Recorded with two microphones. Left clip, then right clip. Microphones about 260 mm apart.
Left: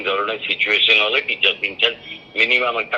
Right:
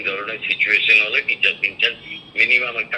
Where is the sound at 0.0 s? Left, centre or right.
Left.